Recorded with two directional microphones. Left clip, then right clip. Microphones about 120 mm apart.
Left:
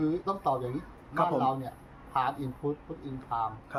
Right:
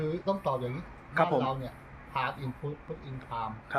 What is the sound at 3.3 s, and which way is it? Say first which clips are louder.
Speech: left 4 dB; 35° left (ahead or behind).